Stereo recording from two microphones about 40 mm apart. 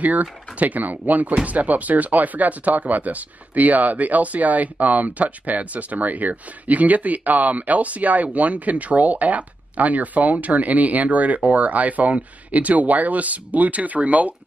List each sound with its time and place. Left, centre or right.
0.0 s speech: right